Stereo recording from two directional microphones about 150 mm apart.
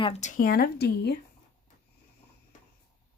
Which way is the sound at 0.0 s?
50° left (ahead or behind).